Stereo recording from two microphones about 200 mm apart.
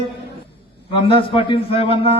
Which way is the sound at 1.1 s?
25° left (ahead or behind).